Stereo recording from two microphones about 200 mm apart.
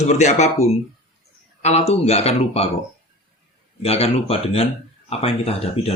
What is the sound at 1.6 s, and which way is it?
Speech, 30° left (ahead or behind).